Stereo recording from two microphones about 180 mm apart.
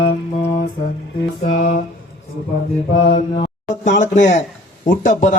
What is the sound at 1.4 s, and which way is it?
Mantra, 40° left (ahead or behind).